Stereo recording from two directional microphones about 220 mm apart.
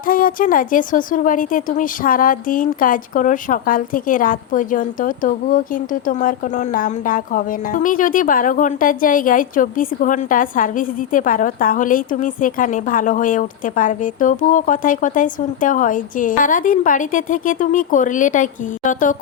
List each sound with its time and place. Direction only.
0.0 s speech: 40° left (ahead or behind)